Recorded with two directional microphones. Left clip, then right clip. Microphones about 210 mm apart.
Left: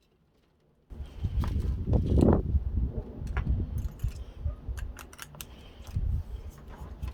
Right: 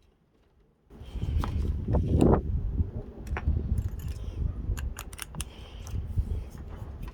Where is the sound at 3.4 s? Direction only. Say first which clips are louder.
Right 2 dB; 35° right (ahead or behind).